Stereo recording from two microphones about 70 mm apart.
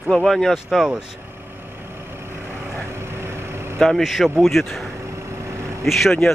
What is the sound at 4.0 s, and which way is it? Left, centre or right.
Speech, centre.